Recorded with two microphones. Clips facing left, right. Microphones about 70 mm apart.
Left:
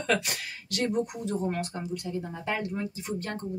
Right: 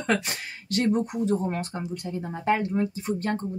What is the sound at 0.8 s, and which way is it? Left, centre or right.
Speech, right.